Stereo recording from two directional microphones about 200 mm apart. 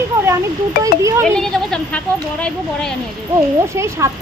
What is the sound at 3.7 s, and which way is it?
Speech, 15° right (ahead or behind).